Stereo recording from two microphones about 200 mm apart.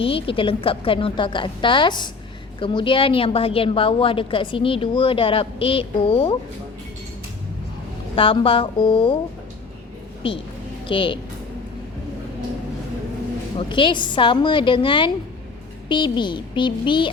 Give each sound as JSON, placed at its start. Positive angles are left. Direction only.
{"t": 0.0, "sound": "a woman's voice", "side_deg": 25}
{"t": 8.1, "sound": "a woman's voice", "side_deg": 25}
{"t": 10.8, "sound": "a woman's voice", "side_deg": 25}
{"t": 13.6, "sound": "a woman's voice", "side_deg": 25}